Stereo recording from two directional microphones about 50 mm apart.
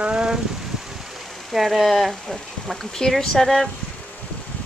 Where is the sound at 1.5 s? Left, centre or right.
Centre.